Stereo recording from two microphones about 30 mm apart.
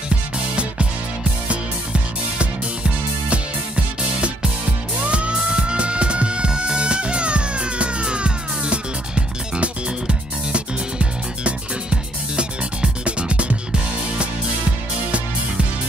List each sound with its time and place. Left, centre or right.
1.5 s music: right